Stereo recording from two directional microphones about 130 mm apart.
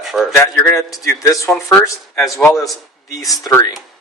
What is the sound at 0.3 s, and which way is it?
A man's voice, 20° left (ahead or behind).